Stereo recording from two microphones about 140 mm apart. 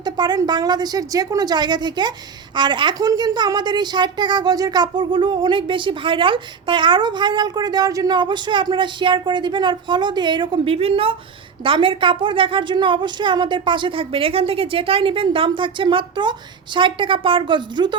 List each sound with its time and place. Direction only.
0.0 s a woman's voice: 30° right (ahead or behind)